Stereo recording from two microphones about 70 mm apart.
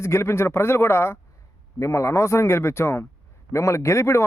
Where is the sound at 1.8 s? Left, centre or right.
Left.